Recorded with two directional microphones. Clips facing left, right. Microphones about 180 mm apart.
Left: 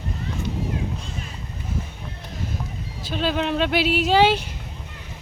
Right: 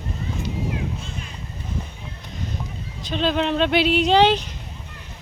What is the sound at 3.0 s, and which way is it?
Speech, 5° left (ahead or behind).